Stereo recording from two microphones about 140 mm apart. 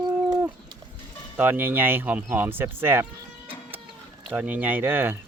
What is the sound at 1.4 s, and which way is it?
Speech, 15° right (ahead or behind).